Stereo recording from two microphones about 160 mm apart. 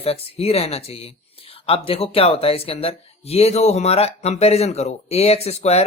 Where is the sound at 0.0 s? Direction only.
40° left (ahead or behind).